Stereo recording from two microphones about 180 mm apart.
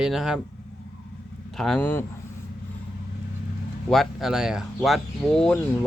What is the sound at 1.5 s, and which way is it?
Speech, 5° left (ahead or behind).